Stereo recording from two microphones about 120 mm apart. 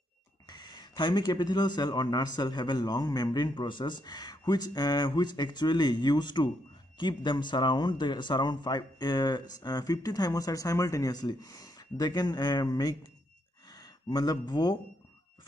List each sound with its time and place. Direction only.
0.5 s a man's voice: 35° left (ahead or behind)